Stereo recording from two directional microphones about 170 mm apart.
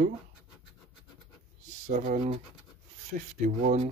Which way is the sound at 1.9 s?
50° right (ahead or behind).